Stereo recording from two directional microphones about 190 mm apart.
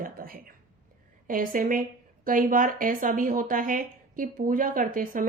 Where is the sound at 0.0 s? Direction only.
50° right (ahead or behind).